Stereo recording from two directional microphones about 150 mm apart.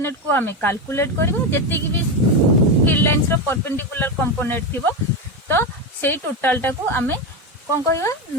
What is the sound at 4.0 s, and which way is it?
Speech, 15° left (ahead or behind).